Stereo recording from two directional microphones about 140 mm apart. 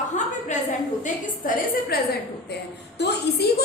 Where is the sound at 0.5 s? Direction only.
60° left (ahead or behind).